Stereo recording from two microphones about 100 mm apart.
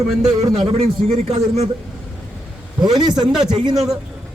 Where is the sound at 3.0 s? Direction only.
45° right (ahead or behind).